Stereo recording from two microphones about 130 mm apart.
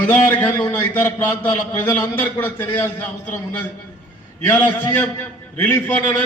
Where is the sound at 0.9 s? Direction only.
15° left (ahead or behind).